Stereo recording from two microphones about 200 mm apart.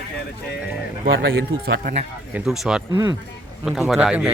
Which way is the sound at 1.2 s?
50° right (ahead or behind).